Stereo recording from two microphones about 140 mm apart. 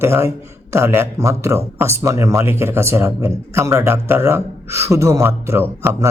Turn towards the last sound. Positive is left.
turn(degrees=-20)  # may be behind; listen again after turning